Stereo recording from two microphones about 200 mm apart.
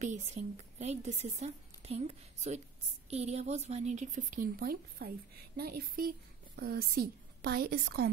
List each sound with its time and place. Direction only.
0.0 s a woman's voice: 35° right (ahead or behind); by 8.1 s 55° right (ahead or behind)